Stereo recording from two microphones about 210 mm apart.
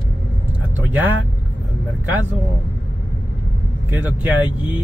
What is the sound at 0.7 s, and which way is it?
Vehicle, 10° right (ahead or behind).